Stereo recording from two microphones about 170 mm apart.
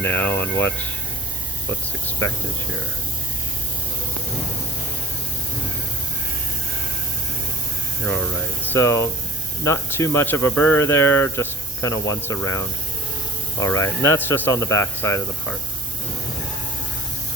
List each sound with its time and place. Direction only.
0.0 s speech: 10° left (ahead or behind)
2.0 s speech: 15° left (ahead or behind)
8.6 s speech: 15° left (ahead or behind)